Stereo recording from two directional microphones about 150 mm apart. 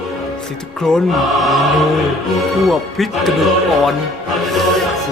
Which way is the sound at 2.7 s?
Centre (ahead or behind).